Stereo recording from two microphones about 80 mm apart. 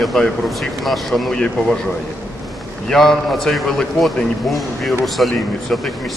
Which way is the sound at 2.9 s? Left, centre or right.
Centre.